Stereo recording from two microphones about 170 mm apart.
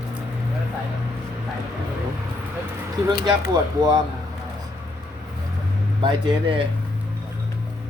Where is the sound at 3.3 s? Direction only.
25° right (ahead or behind).